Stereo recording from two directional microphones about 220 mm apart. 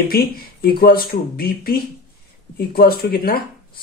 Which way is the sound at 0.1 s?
45° left (ahead or behind).